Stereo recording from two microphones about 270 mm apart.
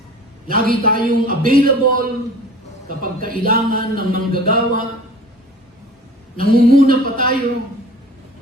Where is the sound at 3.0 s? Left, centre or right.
Right.